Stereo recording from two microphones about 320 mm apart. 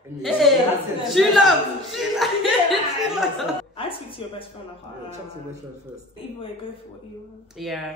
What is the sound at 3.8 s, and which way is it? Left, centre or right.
Speech, centre.